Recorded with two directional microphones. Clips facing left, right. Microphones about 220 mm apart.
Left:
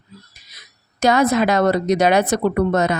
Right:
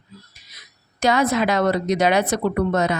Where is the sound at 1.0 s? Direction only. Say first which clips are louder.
Left 3 dB; 45° left (ahead or behind).